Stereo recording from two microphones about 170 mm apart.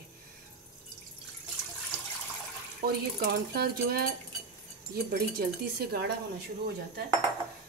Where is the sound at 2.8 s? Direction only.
65° right (ahead or behind).